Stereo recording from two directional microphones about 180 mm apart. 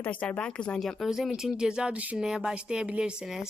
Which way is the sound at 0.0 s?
5° left (ahead or behind).